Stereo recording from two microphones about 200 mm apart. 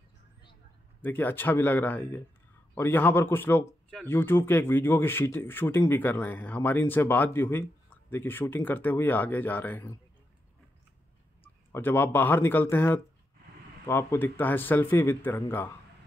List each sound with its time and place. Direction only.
1.0 s speech: 10° left (ahead or behind)
11.4 s speech: 10° left (ahead or behind)